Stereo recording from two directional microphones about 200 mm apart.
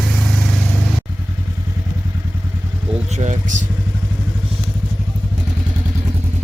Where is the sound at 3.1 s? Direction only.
35° right (ahead or behind).